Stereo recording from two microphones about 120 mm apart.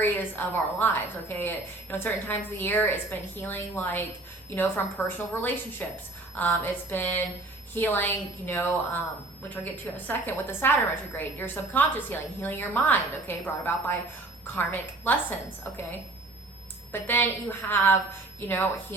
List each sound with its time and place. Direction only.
0.0 s a woman's voice: 15° left (ahead or behind)
16.9 s a woman's voice: 15° left (ahead or behind)